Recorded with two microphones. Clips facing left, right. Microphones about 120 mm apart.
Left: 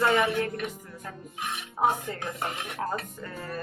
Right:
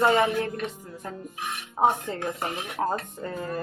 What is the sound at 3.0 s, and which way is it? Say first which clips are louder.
Speech: right 5 dB; 25° right (ahead or behind).